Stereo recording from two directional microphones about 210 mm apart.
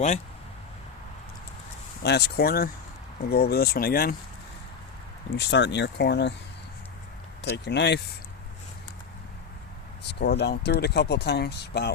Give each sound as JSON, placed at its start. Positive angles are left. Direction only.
{"t": 2.0, "sound": "speech", "side_deg": 50}
{"t": 5.4, "sound": "speech", "side_deg": 55}
{"t": 7.5, "sound": "speech", "side_deg": 55}
{"t": 10.1, "sound": "speech", "side_deg": 50}